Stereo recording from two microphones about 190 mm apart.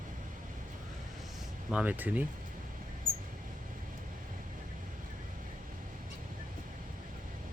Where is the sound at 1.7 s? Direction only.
10° right (ahead or behind).